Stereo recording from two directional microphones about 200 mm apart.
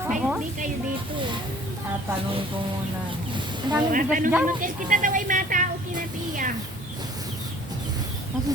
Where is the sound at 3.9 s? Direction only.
40° right (ahead or behind).